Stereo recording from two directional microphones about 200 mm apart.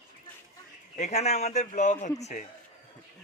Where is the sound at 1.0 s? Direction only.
35° left (ahead or behind).